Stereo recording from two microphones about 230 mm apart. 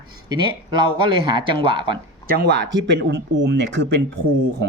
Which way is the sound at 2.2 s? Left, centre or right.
Right.